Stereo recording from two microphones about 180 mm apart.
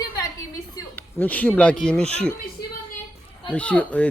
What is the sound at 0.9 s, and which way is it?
A man's voice, 10° left (ahead or behind).